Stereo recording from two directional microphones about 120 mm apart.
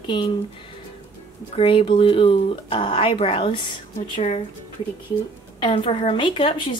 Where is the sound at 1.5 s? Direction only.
50° left (ahead or behind).